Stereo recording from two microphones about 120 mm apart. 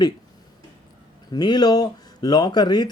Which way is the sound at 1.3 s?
35° left (ahead or behind).